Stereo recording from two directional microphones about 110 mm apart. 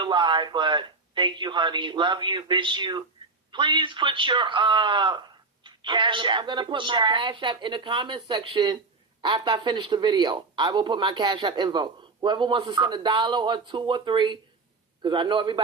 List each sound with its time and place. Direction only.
0.0 s a man's voice: 45° right (ahead or behind)